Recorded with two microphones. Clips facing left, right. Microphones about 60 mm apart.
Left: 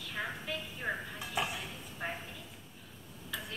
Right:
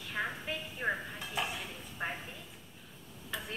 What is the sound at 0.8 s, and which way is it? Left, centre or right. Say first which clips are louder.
Dishes: right 3 dB; right.